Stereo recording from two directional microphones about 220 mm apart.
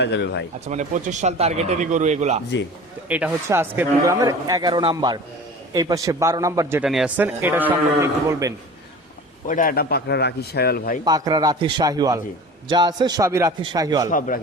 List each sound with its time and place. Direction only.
0.0 s a man's voice: 50° left (ahead or behind)
0.6 s speech: 30° right (ahead or behind)
3.1 s a man's voice: 5° right (ahead or behind)
9.5 s a man's voice: 40° left (ahead or behind)
11.0 s a man's voice: 20° right (ahead or behind)
14.1 s a man's voice: 40° left (ahead or behind)